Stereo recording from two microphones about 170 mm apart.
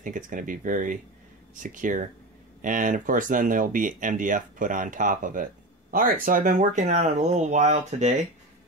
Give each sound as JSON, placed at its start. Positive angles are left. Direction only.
{"t": 0.0, "sound": "speech", "side_deg": -50}